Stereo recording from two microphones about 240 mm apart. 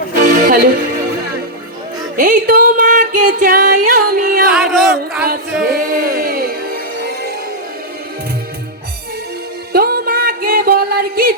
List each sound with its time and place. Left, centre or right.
0.2 s music: right
2.1 s a sound: right
3.2 s music: right
4.5 s a sound: centre
5.3 s music: right
9.7 s music: right